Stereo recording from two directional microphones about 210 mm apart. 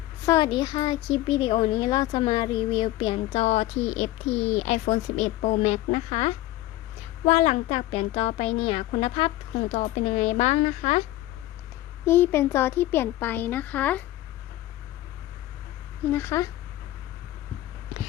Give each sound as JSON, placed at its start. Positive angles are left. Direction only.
{"t": 0.3, "sound": "speech", "side_deg": 20}
{"t": 12.0, "sound": "speech", "side_deg": 10}
{"t": 16.1, "sound": "speech", "side_deg": 10}